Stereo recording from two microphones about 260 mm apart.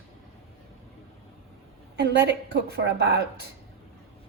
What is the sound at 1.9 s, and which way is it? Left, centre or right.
A woman's voice, right.